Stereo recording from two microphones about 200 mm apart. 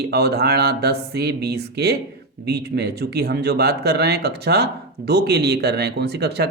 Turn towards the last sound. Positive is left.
turn(degrees=-55)  # may be behind; listen again after turning